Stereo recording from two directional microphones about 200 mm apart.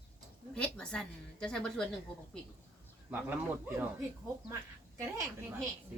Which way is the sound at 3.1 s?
10° right (ahead or behind).